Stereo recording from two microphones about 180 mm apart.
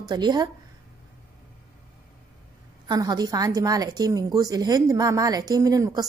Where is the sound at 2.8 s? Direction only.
20° right (ahead or behind).